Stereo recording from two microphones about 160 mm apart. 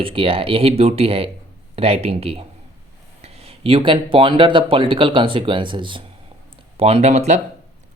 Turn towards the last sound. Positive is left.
turn(degrees=-45)  # may be behind; listen again after turning